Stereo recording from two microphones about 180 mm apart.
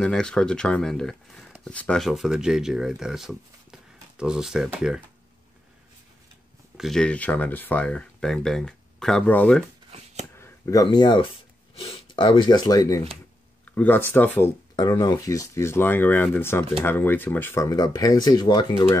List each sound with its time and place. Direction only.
0.0 s speech: 5° left (ahead or behind)
6.8 s speech: 5° left (ahead or behind)
9.8 s shuffling cards: 35° right (ahead or behind)
10.3 s speech: 15° left (ahead or behind)
13.7 s speech: 10° left (ahead or behind)
14.8 s speech: 20° left (ahead or behind)